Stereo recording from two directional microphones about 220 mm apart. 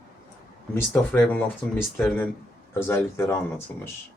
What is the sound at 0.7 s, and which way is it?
Speech, 10° left (ahead or behind).